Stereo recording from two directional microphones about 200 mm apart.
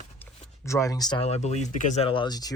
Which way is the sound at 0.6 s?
15° left (ahead or behind).